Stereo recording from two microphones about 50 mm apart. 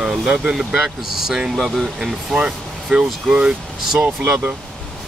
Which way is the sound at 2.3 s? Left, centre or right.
Centre.